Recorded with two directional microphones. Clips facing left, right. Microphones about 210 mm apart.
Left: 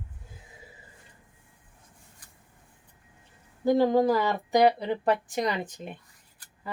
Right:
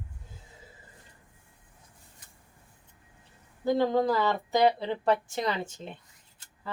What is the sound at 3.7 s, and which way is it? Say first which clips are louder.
A woman's voice: left 3 dB; 15° left (ahead or behind).